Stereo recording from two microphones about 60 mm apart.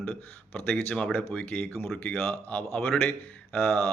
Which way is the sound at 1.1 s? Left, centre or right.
Left.